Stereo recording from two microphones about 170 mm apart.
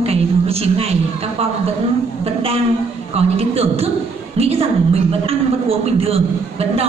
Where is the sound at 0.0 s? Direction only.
35° right (ahead or behind).